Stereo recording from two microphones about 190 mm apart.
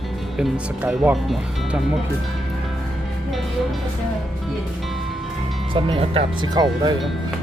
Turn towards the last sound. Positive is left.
turn(degrees=-20)  # may be behind; listen again after turning